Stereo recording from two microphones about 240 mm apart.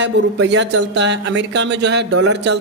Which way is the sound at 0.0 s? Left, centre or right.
Right.